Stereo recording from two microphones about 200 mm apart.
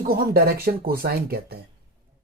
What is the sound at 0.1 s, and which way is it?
Speech, 50° right (ahead or behind).